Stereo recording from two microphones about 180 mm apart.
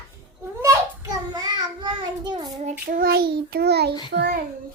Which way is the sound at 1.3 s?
25° right (ahead or behind).